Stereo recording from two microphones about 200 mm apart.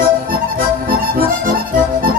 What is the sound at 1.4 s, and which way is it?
Accordion, 45° right (ahead or behind).